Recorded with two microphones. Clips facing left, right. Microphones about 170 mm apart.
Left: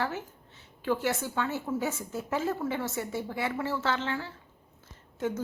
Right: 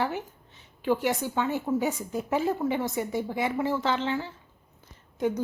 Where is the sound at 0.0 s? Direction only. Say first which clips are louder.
Right 3 dB; 15° right (ahead or behind).